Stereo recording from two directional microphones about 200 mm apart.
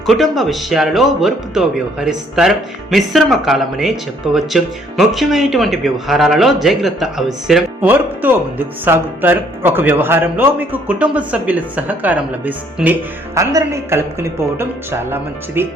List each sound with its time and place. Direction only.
0.0 s speech: centre (ahead or behind)